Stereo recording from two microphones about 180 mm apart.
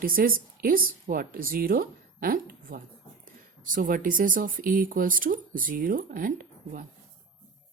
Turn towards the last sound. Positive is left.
turn(degrees=-50)  # may be behind; listen again after turning